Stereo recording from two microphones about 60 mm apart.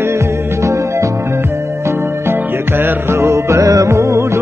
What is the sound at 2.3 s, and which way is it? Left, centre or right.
Music, right.